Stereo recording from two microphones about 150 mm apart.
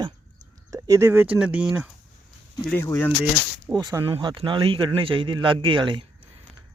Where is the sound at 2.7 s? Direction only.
15° left (ahead or behind).